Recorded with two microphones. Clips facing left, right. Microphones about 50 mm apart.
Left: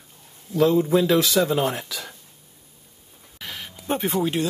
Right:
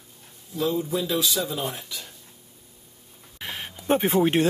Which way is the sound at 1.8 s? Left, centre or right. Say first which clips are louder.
Left 4 dB; left.